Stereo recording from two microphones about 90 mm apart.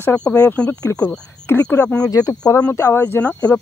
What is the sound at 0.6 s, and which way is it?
Speech, 10° left (ahead or behind).